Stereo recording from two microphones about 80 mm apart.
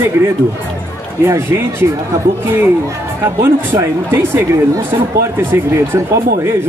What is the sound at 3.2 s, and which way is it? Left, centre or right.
Speech, right.